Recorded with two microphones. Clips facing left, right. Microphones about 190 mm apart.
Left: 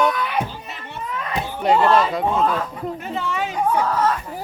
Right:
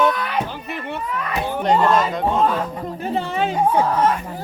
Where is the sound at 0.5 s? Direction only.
60° right (ahead or behind).